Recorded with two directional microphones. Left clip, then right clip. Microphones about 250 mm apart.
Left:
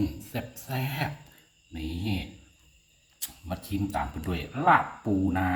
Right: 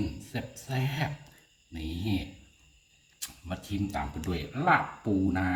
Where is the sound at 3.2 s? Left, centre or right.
Centre.